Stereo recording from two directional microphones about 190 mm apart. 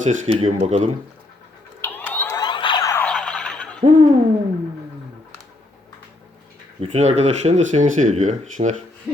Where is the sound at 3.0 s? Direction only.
5° left (ahead or behind).